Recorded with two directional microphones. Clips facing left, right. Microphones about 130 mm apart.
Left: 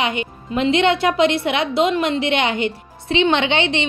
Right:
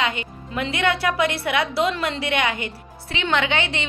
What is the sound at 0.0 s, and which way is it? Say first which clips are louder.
A woman's voice: left 3 dB; 20° left (ahead or behind).